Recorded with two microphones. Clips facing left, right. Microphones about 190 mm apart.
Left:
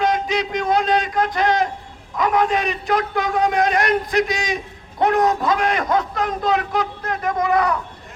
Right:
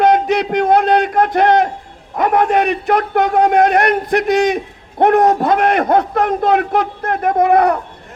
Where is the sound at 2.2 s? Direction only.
55° right (ahead or behind).